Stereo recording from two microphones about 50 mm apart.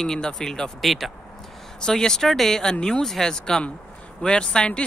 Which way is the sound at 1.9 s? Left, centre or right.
Centre.